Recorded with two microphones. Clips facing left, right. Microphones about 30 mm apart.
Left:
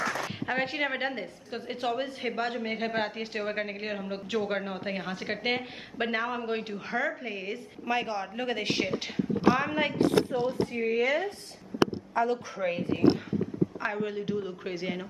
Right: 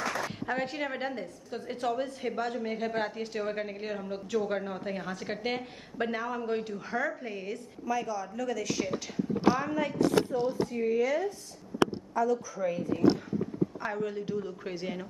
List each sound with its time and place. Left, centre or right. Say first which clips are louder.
0.5 s a woman's voice: left 4 dB; left
7.8 s a man's voice: left 2 dB; left
13.7 s a woman's voice: left 2 dB; left